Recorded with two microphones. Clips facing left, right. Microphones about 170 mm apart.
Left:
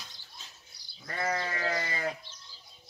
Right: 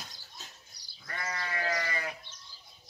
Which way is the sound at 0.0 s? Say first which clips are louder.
Right 2 dB; 45° right (ahead or behind).